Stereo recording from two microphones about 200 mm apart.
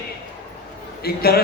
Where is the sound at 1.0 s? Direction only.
50° left (ahead or behind).